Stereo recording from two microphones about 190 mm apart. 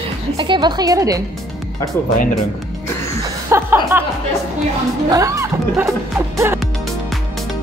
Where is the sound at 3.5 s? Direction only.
15° right (ahead or behind).